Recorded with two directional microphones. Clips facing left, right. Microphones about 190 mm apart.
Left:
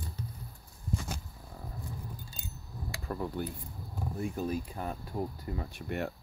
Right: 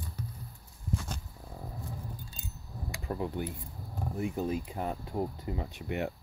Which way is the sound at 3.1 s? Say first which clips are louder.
Right 1 dB; 15° right (ahead or behind).